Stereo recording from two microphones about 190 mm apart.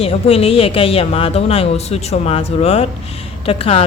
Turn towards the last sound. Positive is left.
turn(degrees=30)  # may be behind; listen again after turning